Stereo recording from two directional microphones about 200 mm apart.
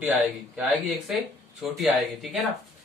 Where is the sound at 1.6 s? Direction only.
Centre (ahead or behind).